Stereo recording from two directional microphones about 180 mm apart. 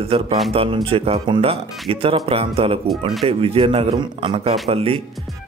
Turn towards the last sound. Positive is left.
turn(degrees=-30)  # may be behind; listen again after turning